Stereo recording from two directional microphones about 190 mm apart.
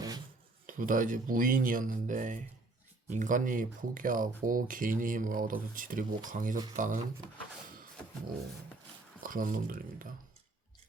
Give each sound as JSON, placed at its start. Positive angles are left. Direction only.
{"t": 0.7, "sound": "speech", "side_deg": -45}
{"t": 9.2, "sound": "speech", "side_deg": -45}